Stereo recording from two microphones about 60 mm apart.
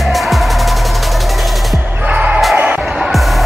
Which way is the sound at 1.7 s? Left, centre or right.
Right.